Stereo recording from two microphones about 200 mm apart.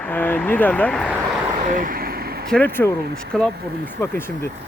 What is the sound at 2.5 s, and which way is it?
Speech, 10° left (ahead or behind).